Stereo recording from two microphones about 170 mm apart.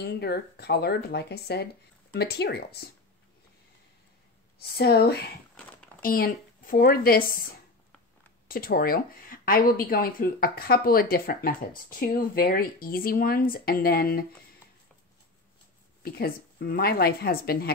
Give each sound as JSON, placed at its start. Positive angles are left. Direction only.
{"t": 0.0, "sound": "speech", "side_deg": 70}
{"t": 4.6, "sound": "speech", "side_deg": 70}
{"t": 6.0, "sound": "speech", "side_deg": 55}
{"t": 8.5, "sound": "speech", "side_deg": 60}
{"t": 16.0, "sound": "speech", "side_deg": 65}